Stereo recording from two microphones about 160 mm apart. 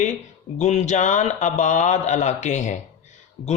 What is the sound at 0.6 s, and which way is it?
Speech, 45° left (ahead or behind).